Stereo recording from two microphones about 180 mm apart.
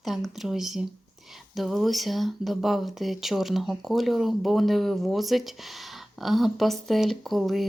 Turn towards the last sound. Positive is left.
turn(degrees=0)  # may be behind; listen again after turning